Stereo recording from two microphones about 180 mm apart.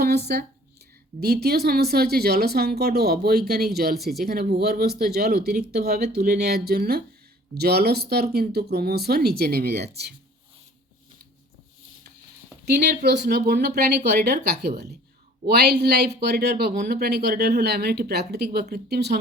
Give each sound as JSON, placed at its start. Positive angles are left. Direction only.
{"t": 1.2, "sound": "speech", "side_deg": -60}
{"t": 12.6, "sound": "speech", "side_deg": -65}